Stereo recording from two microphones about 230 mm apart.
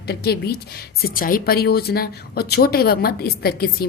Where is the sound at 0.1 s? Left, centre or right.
Left.